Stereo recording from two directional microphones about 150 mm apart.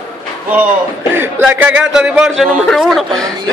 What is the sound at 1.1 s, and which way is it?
A man's voice, 15° right (ahead or behind).